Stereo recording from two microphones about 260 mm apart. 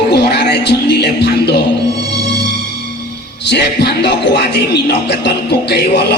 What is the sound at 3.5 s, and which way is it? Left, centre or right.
Music, left.